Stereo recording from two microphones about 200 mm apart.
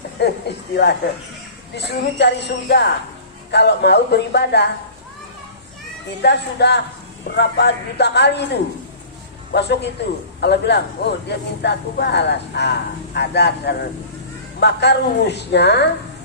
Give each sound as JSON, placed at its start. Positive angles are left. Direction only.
{"t": 0.2, "sound": "speech", "side_deg": 55}
{"t": 6.2, "sound": "speech", "side_deg": 55}
{"t": 9.5, "sound": "speech", "side_deg": 55}